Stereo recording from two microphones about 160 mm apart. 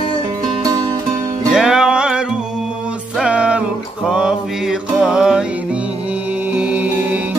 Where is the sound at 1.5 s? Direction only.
5° right (ahead or behind).